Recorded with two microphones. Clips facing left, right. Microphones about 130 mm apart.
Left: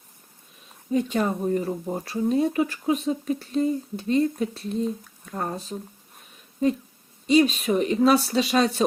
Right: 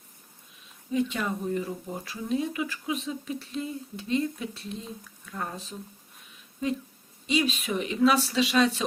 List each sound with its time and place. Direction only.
0.9 s speech: 40° left (ahead or behind)
7.3 s speech: 40° left (ahead or behind)